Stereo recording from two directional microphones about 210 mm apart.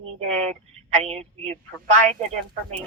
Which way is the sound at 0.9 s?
30° right (ahead or behind).